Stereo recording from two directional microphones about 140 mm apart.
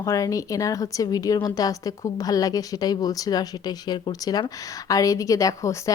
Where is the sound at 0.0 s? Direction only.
25° left (ahead or behind).